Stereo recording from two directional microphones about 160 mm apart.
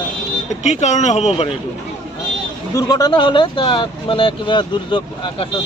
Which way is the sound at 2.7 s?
25° left (ahead or behind).